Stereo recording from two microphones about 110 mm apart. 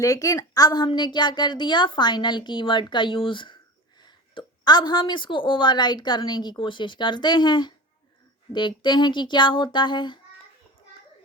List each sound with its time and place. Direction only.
0.0 s a woman's voice: 30° left (ahead or behind)